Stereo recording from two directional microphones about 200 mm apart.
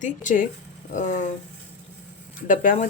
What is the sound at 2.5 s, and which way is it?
Speech, 40° left (ahead or behind).